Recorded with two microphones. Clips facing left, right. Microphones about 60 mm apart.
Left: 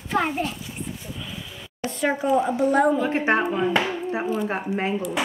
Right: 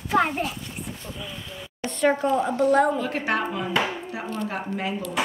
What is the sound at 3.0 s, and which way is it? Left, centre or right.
Speech, left.